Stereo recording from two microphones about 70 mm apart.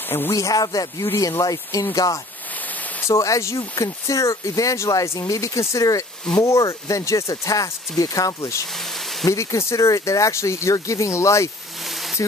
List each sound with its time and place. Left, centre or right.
0.3 s speech: left
3.1 s speech: left
12.2 s speech: left